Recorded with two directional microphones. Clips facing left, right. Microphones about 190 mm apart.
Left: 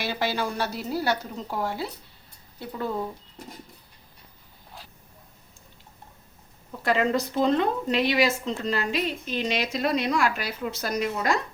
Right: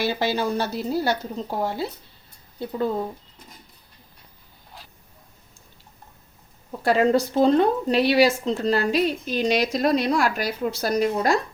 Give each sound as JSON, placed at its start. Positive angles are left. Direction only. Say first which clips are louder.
{"t": 0.2, "sound": "a woman's voice", "louder": "right 4 dB", "side_deg": -25}
{"t": 6.8, "sound": "speech", "louder": "right 5 dB", "side_deg": -35}